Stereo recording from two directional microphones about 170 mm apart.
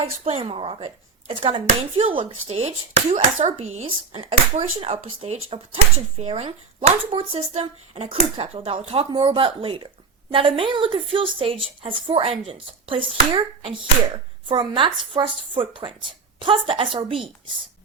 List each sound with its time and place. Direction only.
0.3 s a woman's voice: 35° right (ahead or behind)